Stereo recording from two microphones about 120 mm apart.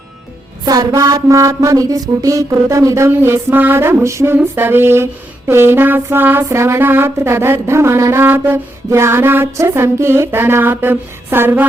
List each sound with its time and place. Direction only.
0.6 s speech: 30° right (ahead or behind)
4.4 s a sound: 15° right (ahead or behind)
5.5 s speech: 20° right (ahead or behind)